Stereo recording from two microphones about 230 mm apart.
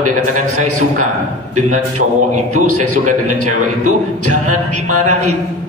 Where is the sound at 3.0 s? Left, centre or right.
Right.